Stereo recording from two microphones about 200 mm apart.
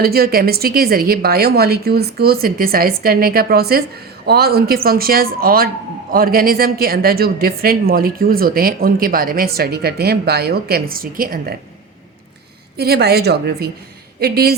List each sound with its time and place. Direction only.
0.0 s speech: 50° right (ahead or behind)
12.7 s speech: 55° right (ahead or behind)